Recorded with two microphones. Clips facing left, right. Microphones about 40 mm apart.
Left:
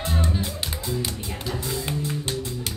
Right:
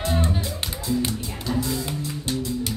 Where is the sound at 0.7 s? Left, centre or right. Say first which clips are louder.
Right 3 dB; left.